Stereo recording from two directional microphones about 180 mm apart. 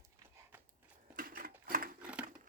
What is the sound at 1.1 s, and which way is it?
Sewing machine, 50° right (ahead or behind).